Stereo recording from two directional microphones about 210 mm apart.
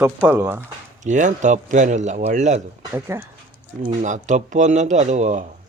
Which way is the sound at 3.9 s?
35° right (ahead or behind).